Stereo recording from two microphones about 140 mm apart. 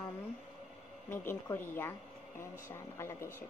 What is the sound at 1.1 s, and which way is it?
A woman's voice, 15° left (ahead or behind).